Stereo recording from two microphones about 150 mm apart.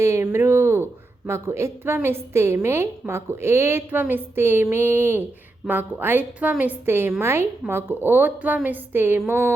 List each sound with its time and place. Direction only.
0.0 s a woman's voice: 20° right (ahead or behind)
0.3 s a sound: 15° right (ahead or behind)
1.3 s a woman's voice: 20° right (ahead or behind)